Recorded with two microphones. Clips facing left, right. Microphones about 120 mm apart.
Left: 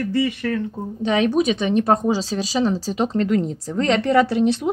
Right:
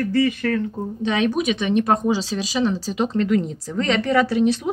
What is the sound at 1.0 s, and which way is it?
A woman's voice, 30° left (ahead or behind).